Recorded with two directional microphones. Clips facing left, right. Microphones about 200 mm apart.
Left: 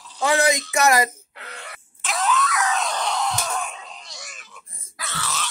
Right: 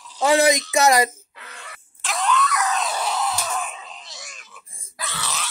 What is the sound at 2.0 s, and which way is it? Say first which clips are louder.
Screaming: right 1 dB; centre (ahead or behind).